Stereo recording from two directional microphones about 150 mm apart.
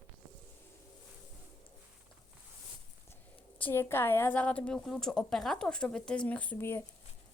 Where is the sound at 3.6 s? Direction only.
15° left (ahead or behind).